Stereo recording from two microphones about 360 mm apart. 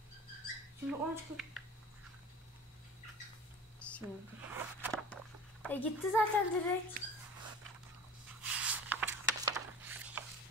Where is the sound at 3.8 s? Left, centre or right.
Centre.